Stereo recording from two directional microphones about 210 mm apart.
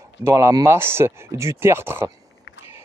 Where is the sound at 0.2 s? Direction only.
15° right (ahead or behind).